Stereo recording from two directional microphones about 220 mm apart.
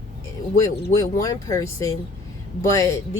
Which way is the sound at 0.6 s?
15° left (ahead or behind).